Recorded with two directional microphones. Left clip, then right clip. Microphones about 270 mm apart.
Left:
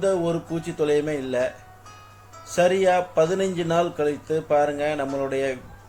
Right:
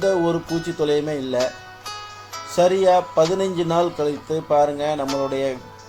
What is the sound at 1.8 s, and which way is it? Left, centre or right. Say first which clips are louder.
Music: right 13 dB; right.